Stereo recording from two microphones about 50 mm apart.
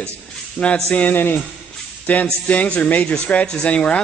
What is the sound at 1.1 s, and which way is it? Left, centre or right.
A man's voice, left.